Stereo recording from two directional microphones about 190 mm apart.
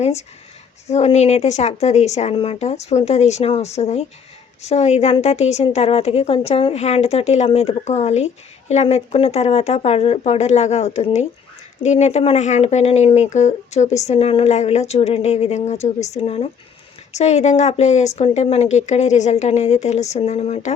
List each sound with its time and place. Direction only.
0.0 s speech: 35° left (ahead or behind)